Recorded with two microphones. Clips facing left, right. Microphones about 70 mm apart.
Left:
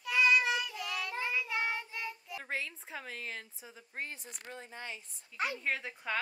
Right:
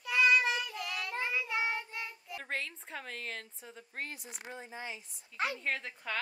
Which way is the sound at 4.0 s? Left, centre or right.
Left.